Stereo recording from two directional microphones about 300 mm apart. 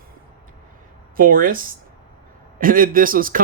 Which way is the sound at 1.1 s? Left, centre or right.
Right.